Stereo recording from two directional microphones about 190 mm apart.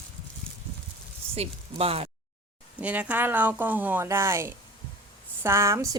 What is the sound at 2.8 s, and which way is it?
Speech, 5° right (ahead or behind).